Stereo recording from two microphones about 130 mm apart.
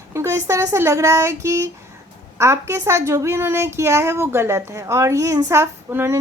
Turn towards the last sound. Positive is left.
turn(degrees=-20)  # may be behind; listen again after turning